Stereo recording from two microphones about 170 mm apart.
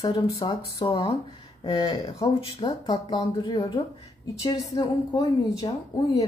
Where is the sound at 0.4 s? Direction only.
30° left (ahead or behind).